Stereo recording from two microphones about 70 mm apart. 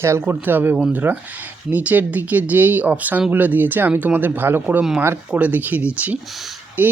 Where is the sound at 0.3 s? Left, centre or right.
Right.